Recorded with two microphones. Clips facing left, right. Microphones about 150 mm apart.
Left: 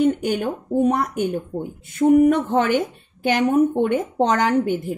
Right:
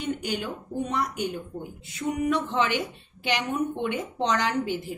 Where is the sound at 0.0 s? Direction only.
50° left (ahead or behind).